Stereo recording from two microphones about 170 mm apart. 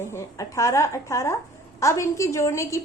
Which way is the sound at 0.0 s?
15° left (ahead or behind).